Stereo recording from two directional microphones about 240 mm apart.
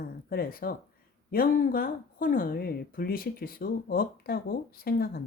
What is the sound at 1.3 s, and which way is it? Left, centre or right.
A woman's voice, left.